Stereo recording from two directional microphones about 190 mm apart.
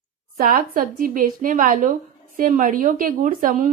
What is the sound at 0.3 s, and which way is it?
A woman's voice, 50° right (ahead or behind).